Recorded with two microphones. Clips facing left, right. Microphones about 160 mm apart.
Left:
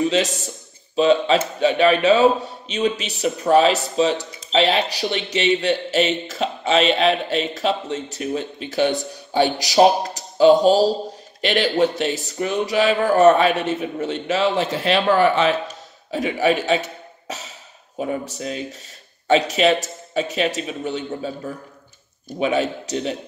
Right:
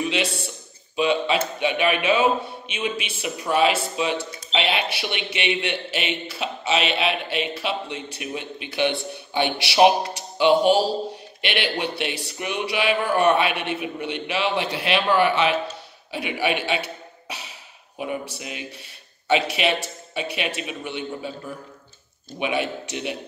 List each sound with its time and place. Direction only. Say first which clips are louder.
0.1 s a man's voice: left 5 dB; 40° left (ahead or behind)
22.4 s speech: left 5 dB; 40° left (ahead or behind)